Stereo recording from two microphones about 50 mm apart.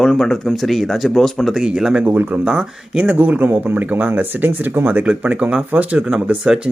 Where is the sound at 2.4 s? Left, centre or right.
Centre; by 4.7 s right.